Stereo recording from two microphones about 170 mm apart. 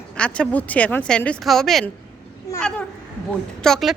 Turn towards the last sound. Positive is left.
turn(degrees=5)  # may be behind; listen again after turning